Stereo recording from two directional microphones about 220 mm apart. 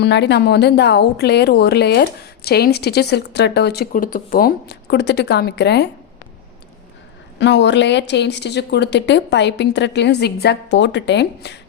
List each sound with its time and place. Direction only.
0.0 s speech: 50° left (ahead or behind)
7.3 s speech: 55° left (ahead or behind)